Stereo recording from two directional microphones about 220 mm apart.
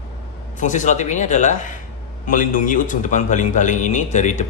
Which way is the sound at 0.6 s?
35° left (ahead or behind).